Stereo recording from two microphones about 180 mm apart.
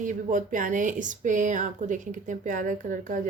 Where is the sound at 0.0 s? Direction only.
45° right (ahead or behind).